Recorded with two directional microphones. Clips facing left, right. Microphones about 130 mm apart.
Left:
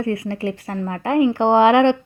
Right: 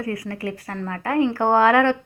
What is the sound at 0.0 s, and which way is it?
A woman's voice, 25° left (ahead or behind).